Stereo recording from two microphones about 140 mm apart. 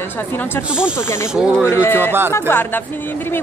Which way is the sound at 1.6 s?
20° left (ahead or behind).